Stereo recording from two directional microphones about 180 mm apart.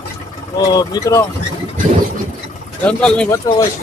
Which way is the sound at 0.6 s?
20° left (ahead or behind).